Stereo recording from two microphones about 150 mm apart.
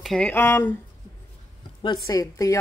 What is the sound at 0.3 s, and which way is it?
Speech, 15° left (ahead or behind).